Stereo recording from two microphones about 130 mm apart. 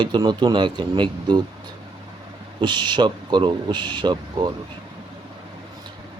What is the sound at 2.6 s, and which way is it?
Speech, 35° right (ahead or behind).